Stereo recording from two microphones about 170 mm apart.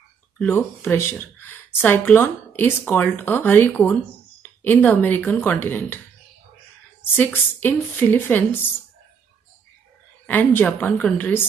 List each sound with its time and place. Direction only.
0.4 s speech: 10° left (ahead or behind)
7.0 s speech: 10° left (ahead or behind)
10.2 s speech: 10° left (ahead or behind)